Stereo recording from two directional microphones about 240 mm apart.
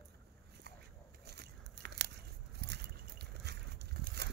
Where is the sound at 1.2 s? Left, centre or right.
Right.